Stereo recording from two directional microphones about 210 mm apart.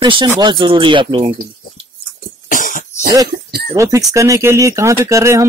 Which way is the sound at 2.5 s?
40° left (ahead or behind).